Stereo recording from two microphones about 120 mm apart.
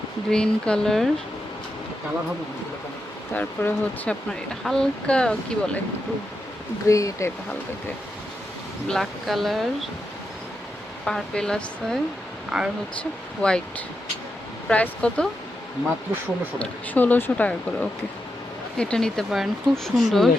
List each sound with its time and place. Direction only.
0.3 s speech: 5° left (ahead or behind)
3.3 s speech: 15° left (ahead or behind)
6.8 s speech: 25° left (ahead or behind)
8.9 s speech: centre (ahead or behind)
11.0 s speech: 5° left (ahead or behind)
12.5 s speech: 5° right (ahead or behind)
13.0 s speech: 10° left (ahead or behind)
16.6 s speech: 10° left (ahead or behind)